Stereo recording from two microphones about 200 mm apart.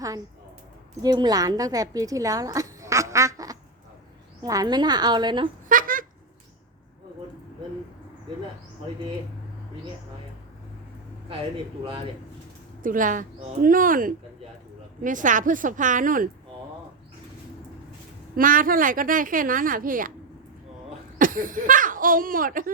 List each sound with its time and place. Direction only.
1.0 s a woman's voice: 20° right (ahead or behind)
5.6 s a sound: 45° right (ahead or behind)
12.8 s a woman's voice: 40° right (ahead or behind)
18.3 s a woman's voice: 45° right (ahead or behind)
21.2 s a woman's voice: 45° right (ahead or behind)